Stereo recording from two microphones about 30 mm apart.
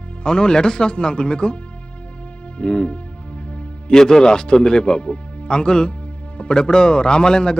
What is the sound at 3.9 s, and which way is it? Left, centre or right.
A man's voice, centre.